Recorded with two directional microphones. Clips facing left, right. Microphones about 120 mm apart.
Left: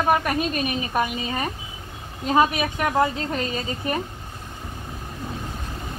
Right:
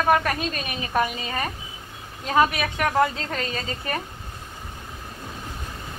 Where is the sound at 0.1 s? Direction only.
10° left (ahead or behind).